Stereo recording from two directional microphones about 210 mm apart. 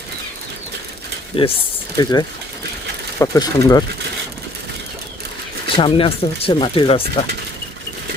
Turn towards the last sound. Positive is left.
turn(degrees=25)  # may be behind; listen again after turning